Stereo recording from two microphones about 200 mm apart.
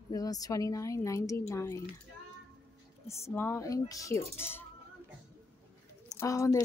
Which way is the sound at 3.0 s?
15° left (ahead or behind).